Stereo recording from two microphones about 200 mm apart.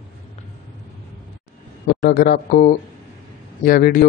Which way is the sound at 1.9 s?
50° left (ahead or behind).